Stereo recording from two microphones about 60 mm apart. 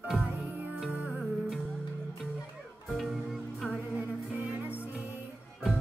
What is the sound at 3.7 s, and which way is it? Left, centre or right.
Music, centre.